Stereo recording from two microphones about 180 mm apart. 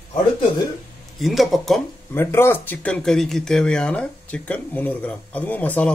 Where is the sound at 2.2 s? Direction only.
15° left (ahead or behind).